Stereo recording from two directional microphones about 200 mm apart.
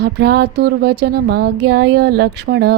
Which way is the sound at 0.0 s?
55° right (ahead or behind).